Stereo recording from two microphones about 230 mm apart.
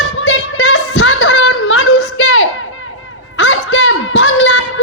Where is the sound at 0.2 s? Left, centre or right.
Left.